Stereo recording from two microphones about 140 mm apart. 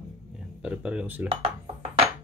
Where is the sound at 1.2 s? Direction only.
45° right (ahead or behind).